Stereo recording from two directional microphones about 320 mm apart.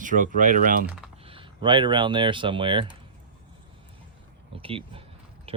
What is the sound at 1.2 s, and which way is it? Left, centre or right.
Speech, centre.